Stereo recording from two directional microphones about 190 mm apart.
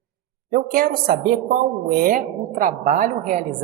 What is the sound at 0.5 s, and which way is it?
A woman's voice, 50° right (ahead or behind).